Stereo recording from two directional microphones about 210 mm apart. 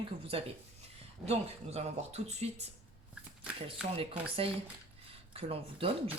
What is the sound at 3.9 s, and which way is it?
A woman's voice, 25° right (ahead or behind).